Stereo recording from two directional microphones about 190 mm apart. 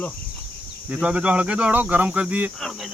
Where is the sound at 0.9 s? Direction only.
5° right (ahead or behind).